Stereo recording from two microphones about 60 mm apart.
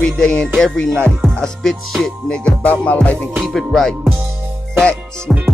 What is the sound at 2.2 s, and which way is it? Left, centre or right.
Music, centre.